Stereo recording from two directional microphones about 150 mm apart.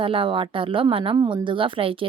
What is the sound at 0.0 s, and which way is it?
A woman's voice, 35° right (ahead or behind).